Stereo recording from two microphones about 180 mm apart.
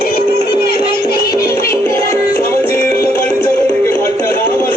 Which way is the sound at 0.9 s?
60° left (ahead or behind).